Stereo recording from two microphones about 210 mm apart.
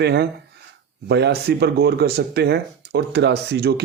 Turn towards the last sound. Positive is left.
turn(degrees=-50)  # may be behind; listen again after turning